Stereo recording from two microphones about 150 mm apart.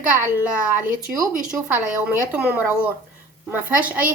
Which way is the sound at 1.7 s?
15° right (ahead or behind).